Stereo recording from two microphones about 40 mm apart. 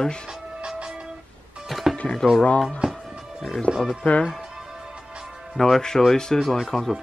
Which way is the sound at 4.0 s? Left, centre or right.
Left.